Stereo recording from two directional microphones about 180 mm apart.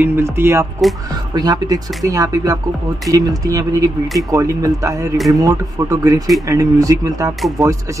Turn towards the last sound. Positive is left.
turn(degrees=-15)  # may be behind; listen again after turning